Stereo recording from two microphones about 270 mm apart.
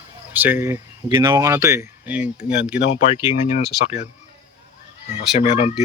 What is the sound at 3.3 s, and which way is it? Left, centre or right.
Speech, left.